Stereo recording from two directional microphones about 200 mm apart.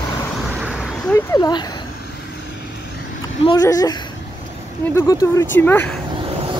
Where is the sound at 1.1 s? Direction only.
15° left (ahead or behind).